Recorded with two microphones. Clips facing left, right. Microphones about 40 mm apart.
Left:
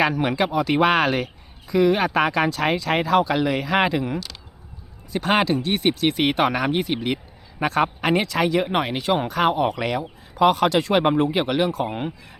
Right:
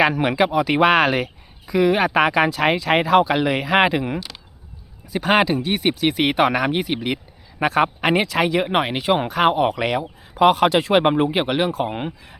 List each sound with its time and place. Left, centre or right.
0.1 s speech: centre
5.1 s speech: centre